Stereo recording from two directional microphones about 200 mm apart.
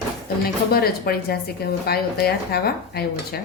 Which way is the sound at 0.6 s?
50° left (ahead or behind).